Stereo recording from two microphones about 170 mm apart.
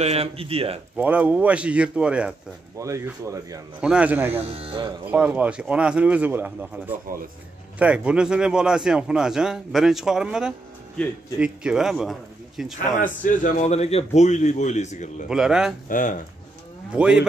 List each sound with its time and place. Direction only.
0.0 s speech: 40° right (ahead or behind)
0.9 s speech: 10° right (ahead or behind)
2.8 s speech: 20° right (ahead or behind)
3.8 s speech: 5° right (ahead or behind)
4.5 s speech: 35° right (ahead or behind)
5.0 s speech: 10° right (ahead or behind)
7.1 s speech: 55° right (ahead or behind)
7.8 s a man's voice: 5° right (ahead or behind)
13.2 s a man's voice: 50° left (ahead or behind)
15.2 s a man's voice: 5° right (ahead or behind)
15.9 s a man's voice: 50° left (ahead or behind)
16.9 s a man's voice: 5° right (ahead or behind)